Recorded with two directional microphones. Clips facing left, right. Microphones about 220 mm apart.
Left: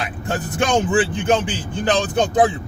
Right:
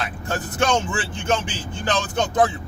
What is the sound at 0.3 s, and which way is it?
A man's voice, 15° left (ahead or behind).